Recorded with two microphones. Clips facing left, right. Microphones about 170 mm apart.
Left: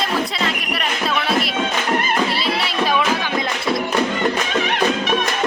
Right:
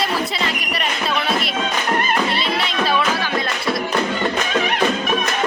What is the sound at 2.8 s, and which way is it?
Music, 15° left (ahead or behind).